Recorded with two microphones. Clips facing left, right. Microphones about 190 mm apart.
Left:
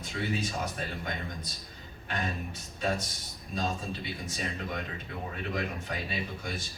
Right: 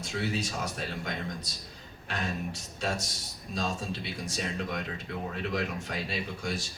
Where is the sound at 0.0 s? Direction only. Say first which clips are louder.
Right 1 dB; 80° right.